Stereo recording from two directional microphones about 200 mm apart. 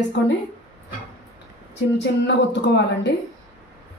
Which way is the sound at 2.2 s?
60° left (ahead or behind).